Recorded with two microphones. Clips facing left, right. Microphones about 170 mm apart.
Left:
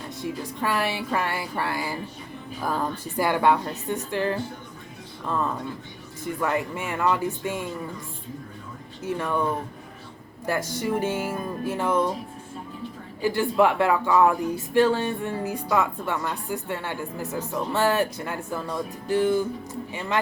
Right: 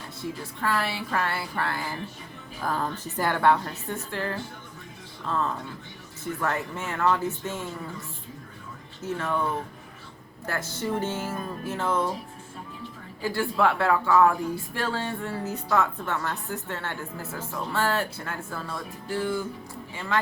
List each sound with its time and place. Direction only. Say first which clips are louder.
0.2 s speech: left 3 dB; 15° left (ahead or behind)
6.2 s speech: left 3 dB; 15° left (ahead or behind)
9.0 s speech: left 2 dB; 15° left (ahead or behind)
10.4 s speech: left 4 dB; 15° left (ahead or behind)
13.2 s speech: left 4 dB; 20° left (ahead or behind)